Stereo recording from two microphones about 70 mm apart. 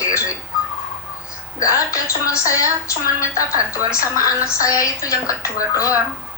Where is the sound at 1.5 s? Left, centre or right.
Left.